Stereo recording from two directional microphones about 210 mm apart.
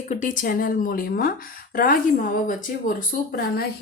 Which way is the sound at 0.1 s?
35° left (ahead or behind).